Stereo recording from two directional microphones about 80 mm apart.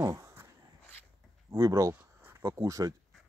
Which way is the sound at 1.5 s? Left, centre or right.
Right.